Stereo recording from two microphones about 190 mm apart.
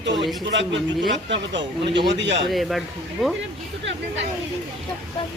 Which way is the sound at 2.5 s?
Centre (ahead or behind).